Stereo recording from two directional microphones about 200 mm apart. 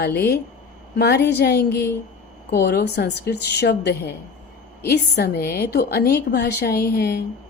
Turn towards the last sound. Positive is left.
turn(degrees=50)  # may be behind; listen again after turning